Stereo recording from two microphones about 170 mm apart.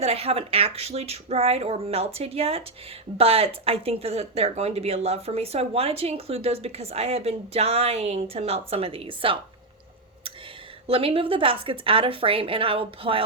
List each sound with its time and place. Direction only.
0.0 s speech: 35° right (ahead or behind)
10.8 s speech: 35° right (ahead or behind)